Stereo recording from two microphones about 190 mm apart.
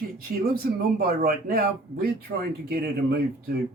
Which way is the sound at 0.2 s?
50° right (ahead or behind).